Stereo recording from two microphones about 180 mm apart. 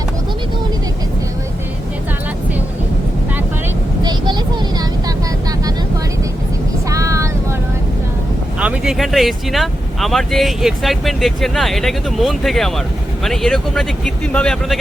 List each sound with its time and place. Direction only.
4.0 s vehicle: 25° right (ahead or behind)
6.9 s vehicle: 15° right (ahead or behind)
8.5 s speech: 5° right (ahead or behind)